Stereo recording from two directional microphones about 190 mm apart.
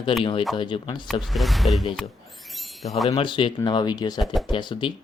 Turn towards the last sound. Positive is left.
turn(degrees=25)  # may be behind; listen again after turning